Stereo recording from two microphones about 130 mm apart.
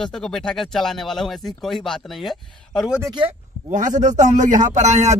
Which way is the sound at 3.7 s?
75° right (ahead or behind).